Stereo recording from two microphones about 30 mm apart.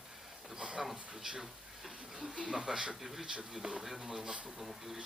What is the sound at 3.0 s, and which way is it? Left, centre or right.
Speech, centre.